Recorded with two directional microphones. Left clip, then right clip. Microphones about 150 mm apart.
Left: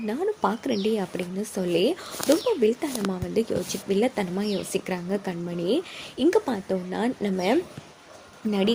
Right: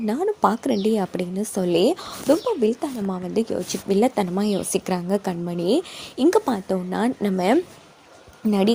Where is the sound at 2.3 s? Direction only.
15° right (ahead or behind).